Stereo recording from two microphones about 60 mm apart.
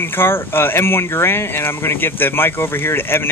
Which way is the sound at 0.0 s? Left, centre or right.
Left.